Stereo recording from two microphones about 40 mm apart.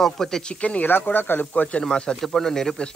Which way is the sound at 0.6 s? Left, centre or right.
Left.